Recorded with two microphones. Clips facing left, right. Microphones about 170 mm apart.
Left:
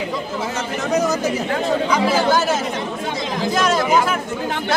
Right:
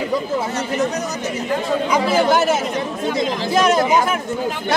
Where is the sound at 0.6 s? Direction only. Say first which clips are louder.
Left 1 dB; 90° left.